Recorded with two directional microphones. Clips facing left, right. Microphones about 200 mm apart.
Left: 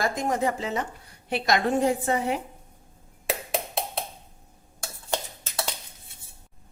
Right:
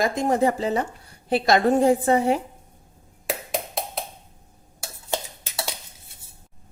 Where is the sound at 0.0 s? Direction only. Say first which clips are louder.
Right 5 dB; 25° right (ahead or behind).